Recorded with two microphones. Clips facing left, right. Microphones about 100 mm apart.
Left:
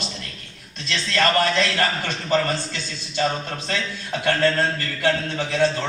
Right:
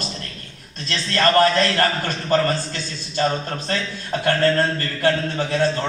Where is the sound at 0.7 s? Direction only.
40° right (ahead or behind).